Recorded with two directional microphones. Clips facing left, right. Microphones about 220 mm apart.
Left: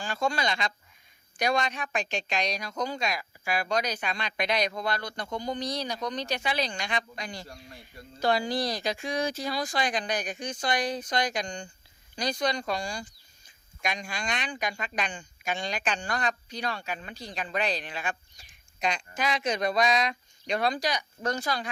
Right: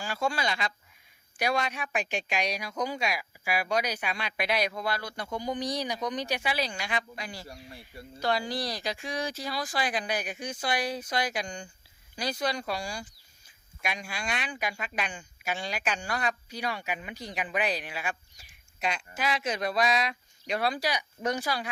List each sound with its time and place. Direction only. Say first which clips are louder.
0.0 s speech: left 1 dB; 5° right (ahead or behind)
8.4 s speech: left 3 dB; 20° left (ahead or behind)
8.7 s speech: left 3 dB; centre (ahead or behind)